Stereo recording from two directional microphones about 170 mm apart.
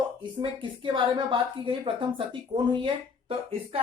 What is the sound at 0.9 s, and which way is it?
A woman's voice, 30° right (ahead or behind).